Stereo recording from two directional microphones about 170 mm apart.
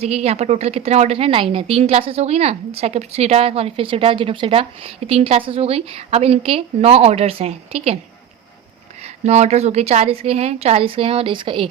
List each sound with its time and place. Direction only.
0.0 s speech: 40° right (ahead or behind)
9.2 s speech: 40° right (ahead or behind)